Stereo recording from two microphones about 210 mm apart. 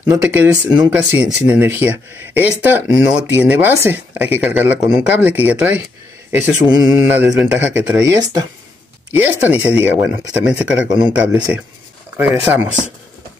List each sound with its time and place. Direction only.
0.2 s speech: 10° right (ahead or behind)